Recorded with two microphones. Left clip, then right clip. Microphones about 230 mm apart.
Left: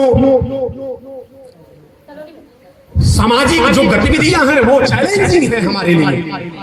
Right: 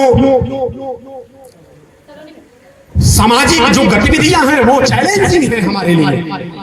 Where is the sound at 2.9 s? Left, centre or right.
Right.